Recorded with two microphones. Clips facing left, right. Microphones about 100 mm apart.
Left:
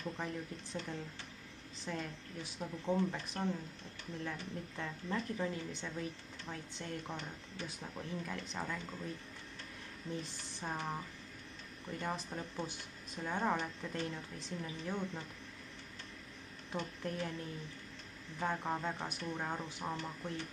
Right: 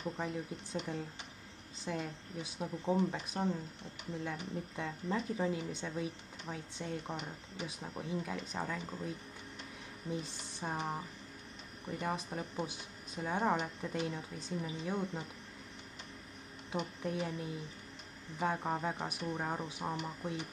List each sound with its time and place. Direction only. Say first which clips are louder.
0.0 s a woman's voice: right 2 dB; 15° right (ahead or behind)
16.7 s a woman's voice: right 3 dB; 15° right (ahead or behind)